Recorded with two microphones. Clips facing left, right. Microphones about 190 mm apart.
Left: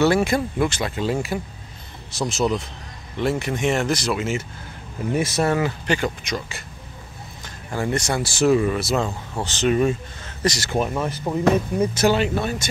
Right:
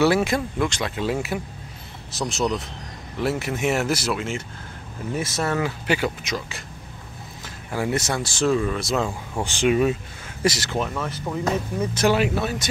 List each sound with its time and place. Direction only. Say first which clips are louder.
0.0 s speech: left 1 dB; centre (ahead or behind)
5.1 s speech: left 4 dB; 15° left (ahead or behind)
5.6 s speech: left 1 dB; 5° right (ahead or behind)
8.2 s speech: left 6 dB; 10° left (ahead or behind)
9.4 s speech: even; 10° right (ahead or behind)
10.7 s speech: left 3 dB; 15° left (ahead or behind)
11.8 s speech: left 1 dB; 10° left (ahead or behind)
12.1 s speech: left 1 dB; 5° right (ahead or behind)